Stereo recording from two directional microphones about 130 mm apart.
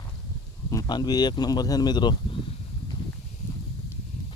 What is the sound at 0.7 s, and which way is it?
Speech, 30° left (ahead or behind).